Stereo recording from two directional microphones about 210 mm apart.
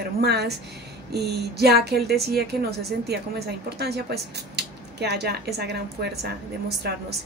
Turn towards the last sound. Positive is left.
turn(degrees=-50)  # may be behind; listen again after turning